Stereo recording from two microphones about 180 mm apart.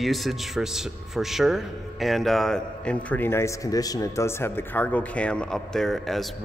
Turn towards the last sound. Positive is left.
turn(degrees=0)  # may be behind; listen again after turning